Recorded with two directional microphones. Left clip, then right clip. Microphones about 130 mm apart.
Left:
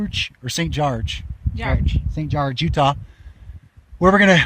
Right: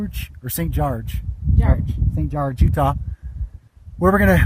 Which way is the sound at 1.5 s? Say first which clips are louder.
Left 1 dB; 10° left (ahead or behind).